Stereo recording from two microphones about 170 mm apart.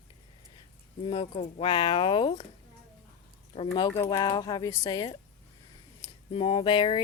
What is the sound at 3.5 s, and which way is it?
Speech, 35° left (ahead or behind).